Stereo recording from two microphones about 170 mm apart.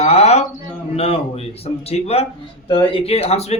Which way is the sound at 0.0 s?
40° left (ahead or behind).